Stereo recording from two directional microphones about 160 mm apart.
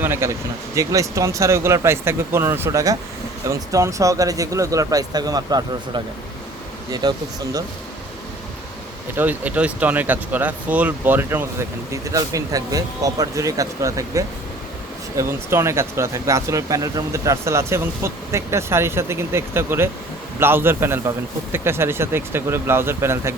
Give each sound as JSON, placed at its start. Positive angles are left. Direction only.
{"t": 0.0, "sound": "speech", "side_deg": -15}
{"t": 7.0, "sound": "speech", "side_deg": -25}
{"t": 9.1, "sound": "speech", "side_deg": -10}